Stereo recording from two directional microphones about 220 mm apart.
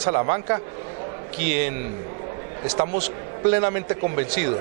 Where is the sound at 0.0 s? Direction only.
20° right (ahead or behind).